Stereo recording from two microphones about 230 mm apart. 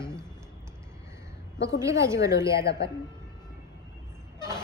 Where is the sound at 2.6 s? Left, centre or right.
Left.